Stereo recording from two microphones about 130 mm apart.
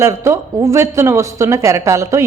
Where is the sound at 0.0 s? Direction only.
20° right (ahead or behind).